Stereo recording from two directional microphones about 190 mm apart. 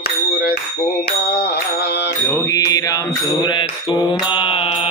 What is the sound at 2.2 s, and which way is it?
Mantra, 15° left (ahead or behind).